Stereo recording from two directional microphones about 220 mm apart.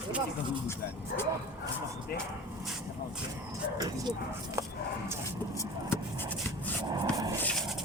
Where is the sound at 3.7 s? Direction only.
15° right (ahead or behind).